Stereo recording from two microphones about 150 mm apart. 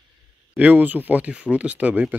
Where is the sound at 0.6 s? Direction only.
10° right (ahead or behind).